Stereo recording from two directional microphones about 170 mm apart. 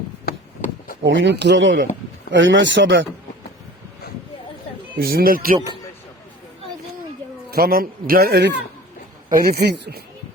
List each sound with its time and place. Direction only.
1.0 s speech: 90° right
4.9 s speech: 60° right (ahead or behind)
7.5 s speech: 60° right (ahead or behind); by 8.6 s 85° right
9.3 s speech: 65° right (ahead or behind)